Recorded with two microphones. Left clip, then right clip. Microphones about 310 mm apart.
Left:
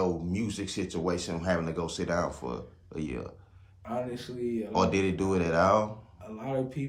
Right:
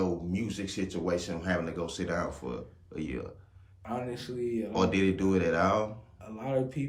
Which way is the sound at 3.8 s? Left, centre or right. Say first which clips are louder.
Left 2 dB; centre.